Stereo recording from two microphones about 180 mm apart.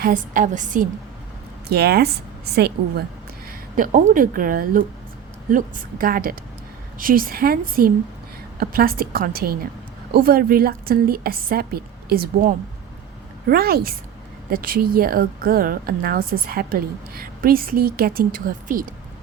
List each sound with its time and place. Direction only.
0.0 s a woman's voice: 45° right (ahead or behind)
1.7 s speech: 65° right (ahead or behind)
3.8 s a woman's voice: 45° right (ahead or behind)